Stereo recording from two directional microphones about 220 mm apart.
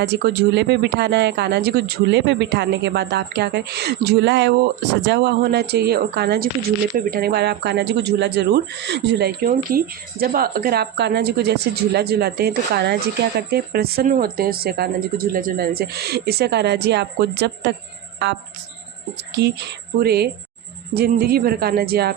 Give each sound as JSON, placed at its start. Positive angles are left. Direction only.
{"t": 0.0, "sound": "speech", "side_deg": -50}
{"t": 19.1, "sound": "speech", "side_deg": -50}